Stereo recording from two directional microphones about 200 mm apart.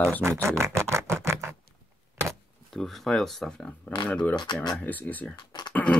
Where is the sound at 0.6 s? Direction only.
15° right (ahead or behind).